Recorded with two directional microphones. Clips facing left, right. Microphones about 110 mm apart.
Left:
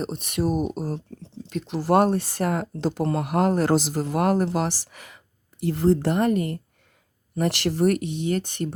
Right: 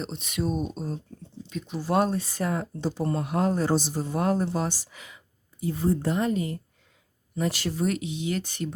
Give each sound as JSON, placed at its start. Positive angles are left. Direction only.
{"t": 0.0, "sound": "speech", "side_deg": 55}